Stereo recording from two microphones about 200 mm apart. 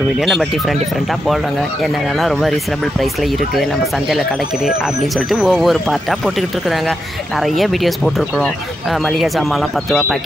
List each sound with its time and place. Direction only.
0.2 s speech: centre (ahead or behind)
4.6 s speech: centre (ahead or behind)